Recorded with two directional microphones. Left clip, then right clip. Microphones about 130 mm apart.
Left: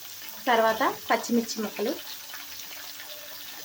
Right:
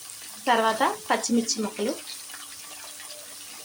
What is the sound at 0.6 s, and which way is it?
Speech, 20° right (ahead or behind).